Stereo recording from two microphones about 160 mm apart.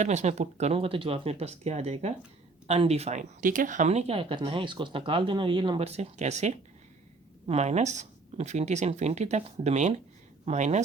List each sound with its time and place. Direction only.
0.0 s speech: 45° right (ahead or behind); by 5.9 s 30° right (ahead or behind)
5.9 s speech: 45° right (ahead or behind)